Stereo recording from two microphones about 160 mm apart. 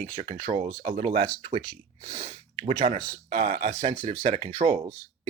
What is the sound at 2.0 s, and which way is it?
Speech, 35° right (ahead or behind).